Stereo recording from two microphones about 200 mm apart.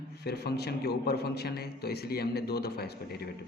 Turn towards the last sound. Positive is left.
turn(degrees=50)  # may be behind; listen again after turning